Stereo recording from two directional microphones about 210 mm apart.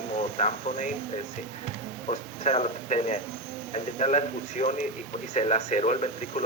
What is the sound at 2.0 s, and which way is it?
Speech, 30° left (ahead or behind).